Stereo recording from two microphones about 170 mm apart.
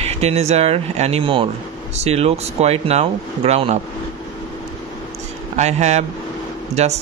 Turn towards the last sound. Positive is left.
turn(degrees=-40)  # may be behind; listen again after turning